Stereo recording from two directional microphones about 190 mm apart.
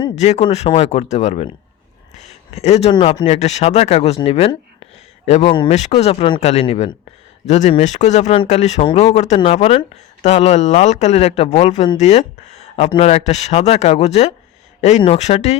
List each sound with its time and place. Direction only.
0.2 s speech: 35° left (ahead or behind)